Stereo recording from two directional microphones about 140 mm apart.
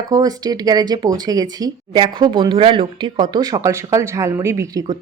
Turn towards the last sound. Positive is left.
turn(degrees=-25)  # may be behind; listen again after turning